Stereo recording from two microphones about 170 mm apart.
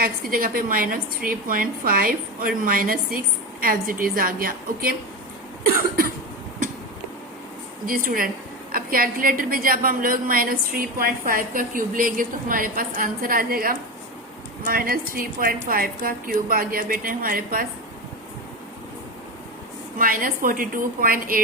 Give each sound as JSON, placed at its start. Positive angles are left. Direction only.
{"t": 0.0, "sound": "a woman's voice", "side_deg": -60}
{"t": 5.6, "sound": "cough", "side_deg": -60}
{"t": 7.9, "sound": "a woman's voice", "side_deg": -55}
{"t": 20.0, "sound": "a woman's voice", "side_deg": -55}